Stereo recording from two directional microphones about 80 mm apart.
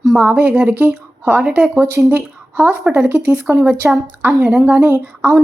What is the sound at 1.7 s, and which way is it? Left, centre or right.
A woman's voice, right.